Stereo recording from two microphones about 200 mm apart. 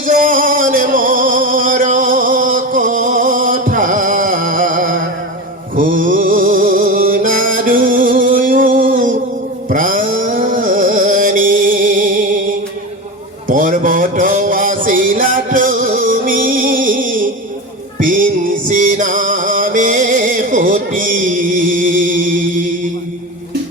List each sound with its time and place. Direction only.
0.0 s music: 45° right (ahead or behind)
13.5 s music: 40° right (ahead or behind)